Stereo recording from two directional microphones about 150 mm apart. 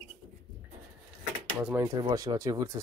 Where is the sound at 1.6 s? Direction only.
10° right (ahead or behind).